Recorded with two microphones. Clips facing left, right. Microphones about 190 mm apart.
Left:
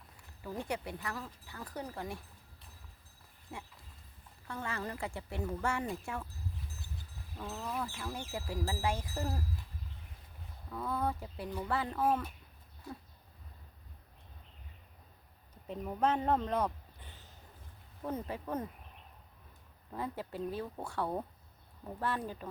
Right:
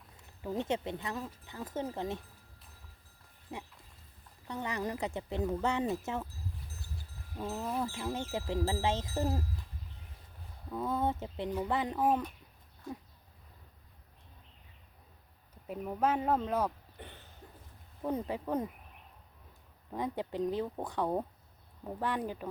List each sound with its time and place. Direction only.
0.4 s speech: 20° right (ahead or behind)
3.5 s speech: 20° right (ahead or behind)
7.3 s speech: 20° right (ahead or behind)
10.7 s speech: 20° right (ahead or behind)
15.6 s speech: 5° right (ahead or behind)
17.0 s a sound: 65° right (ahead or behind)
18.0 s speech: 15° right (ahead or behind)
19.9 s speech: 15° right (ahead or behind)